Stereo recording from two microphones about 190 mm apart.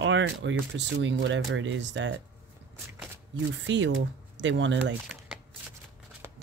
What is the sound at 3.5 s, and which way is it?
Speech, 75° right (ahead or behind).